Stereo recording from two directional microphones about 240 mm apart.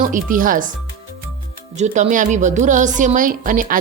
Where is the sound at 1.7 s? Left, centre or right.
Right.